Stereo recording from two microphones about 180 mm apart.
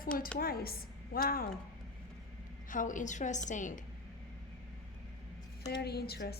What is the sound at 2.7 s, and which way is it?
A woman's voice, 45° left (ahead or behind).